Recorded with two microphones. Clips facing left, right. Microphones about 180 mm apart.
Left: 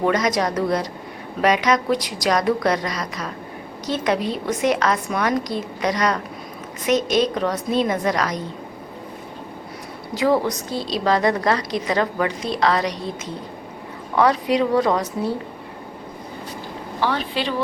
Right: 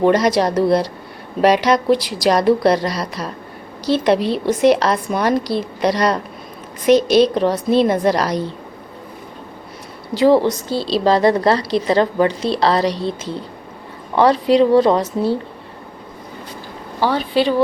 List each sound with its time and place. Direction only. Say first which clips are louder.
0.0 s a woman's voice: right 5 dB; 30° right (ahead or behind)
10.2 s a woman's voice: right 6 dB; 30° right (ahead or behind)